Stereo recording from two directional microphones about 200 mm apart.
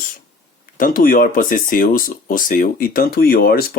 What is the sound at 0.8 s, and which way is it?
Speech, 45° left (ahead or behind).